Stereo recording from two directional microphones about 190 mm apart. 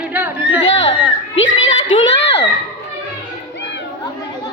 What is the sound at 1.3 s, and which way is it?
Children playing, 90° left.